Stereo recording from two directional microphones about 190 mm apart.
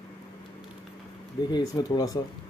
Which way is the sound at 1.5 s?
20° left (ahead or behind).